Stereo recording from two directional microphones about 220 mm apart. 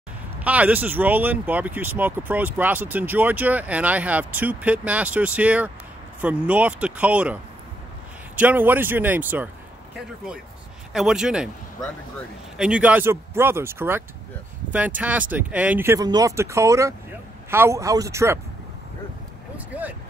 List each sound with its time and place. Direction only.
0.4 s speech: 5° right (ahead or behind)
8.4 s speech: 10° right (ahead or behind)
10.9 s speech: centre (ahead or behind)
19.5 s speech: 5° right (ahead or behind)